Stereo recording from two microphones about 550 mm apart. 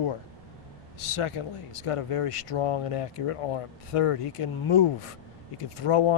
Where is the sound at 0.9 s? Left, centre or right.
Left.